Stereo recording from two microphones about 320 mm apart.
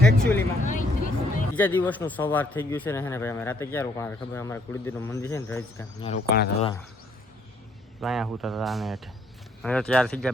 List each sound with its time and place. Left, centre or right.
0.0 s speech: centre
0.6 s vehicle: left
1.5 s speech: centre
8.0 s speech: centre